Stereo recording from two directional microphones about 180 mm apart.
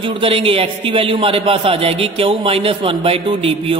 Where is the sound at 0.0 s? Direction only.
30° right (ahead or behind).